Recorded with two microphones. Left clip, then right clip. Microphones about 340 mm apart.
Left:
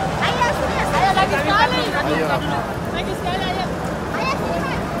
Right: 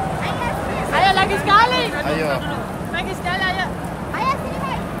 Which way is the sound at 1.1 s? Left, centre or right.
Right.